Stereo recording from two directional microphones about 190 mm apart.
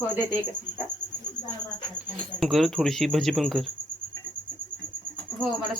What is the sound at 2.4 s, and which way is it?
Speech, centre (ahead or behind).